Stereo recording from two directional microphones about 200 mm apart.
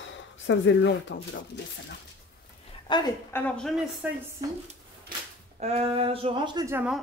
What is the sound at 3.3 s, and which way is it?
Speech, 5° left (ahead or behind).